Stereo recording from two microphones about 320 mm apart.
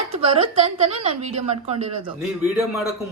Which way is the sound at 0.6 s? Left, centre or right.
Centre.